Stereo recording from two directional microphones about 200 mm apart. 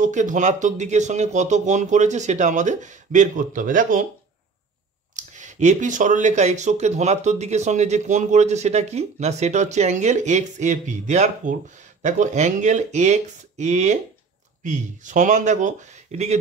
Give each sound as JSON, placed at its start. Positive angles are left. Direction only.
{"t": 0.0, "sound": "speech", "side_deg": -40}
{"t": 5.1, "sound": "speech", "side_deg": -35}